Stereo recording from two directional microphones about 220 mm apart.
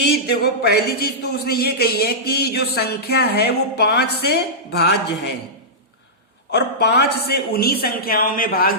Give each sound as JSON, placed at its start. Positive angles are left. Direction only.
{"t": 0.1, "sound": "a man's voice", "side_deg": 45}
{"t": 6.5, "sound": "a man's voice", "side_deg": 50}